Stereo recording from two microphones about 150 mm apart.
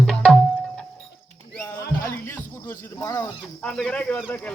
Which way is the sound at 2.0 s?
15° left (ahead or behind).